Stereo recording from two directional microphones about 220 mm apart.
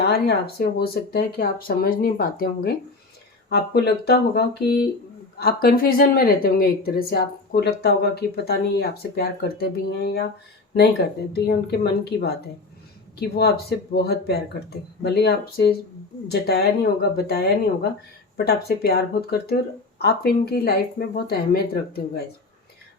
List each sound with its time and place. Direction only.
0.0 s speech: 45° left (ahead or behind)
11.3 s speech: 45° left (ahead or behind)